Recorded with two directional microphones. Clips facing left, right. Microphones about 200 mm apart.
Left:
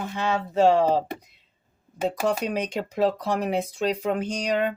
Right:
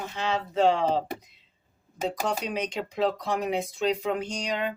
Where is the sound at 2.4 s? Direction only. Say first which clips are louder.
Left 3 dB; 55° left (ahead or behind).